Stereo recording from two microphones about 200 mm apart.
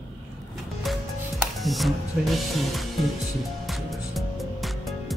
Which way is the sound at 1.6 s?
Centre (ahead or behind).